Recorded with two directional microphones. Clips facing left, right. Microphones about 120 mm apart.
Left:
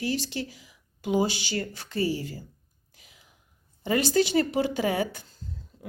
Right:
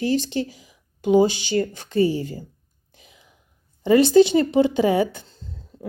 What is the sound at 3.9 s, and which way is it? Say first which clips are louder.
Speech: right 10 dB; 25° right (ahead or behind).